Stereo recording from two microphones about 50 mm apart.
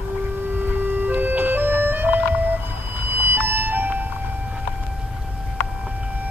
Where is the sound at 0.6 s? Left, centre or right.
Right.